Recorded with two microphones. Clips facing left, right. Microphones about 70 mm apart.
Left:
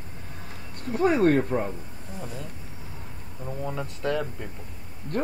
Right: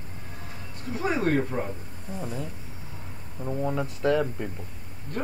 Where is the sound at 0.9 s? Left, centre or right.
Left.